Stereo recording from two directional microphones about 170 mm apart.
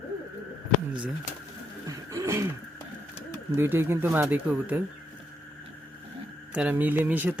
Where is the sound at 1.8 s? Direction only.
20° right (ahead or behind).